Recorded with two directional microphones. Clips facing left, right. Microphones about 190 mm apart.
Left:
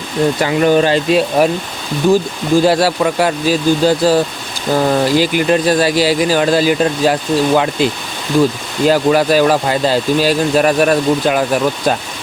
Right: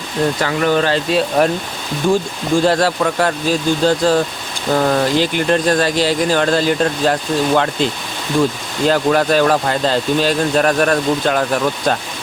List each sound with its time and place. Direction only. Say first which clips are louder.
0.3 s speech: left 6 dB; 15° left (ahead or behind)
2.6 s speech: left 2 dB; 10° left (ahead or behind)